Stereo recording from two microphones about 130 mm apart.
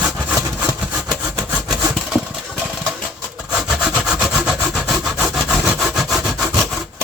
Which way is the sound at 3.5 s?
5° right (ahead or behind).